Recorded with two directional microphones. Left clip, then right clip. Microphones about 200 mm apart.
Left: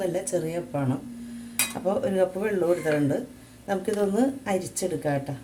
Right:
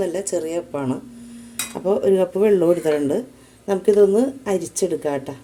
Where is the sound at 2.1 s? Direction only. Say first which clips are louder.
Right 8 dB; 35° right (ahead or behind).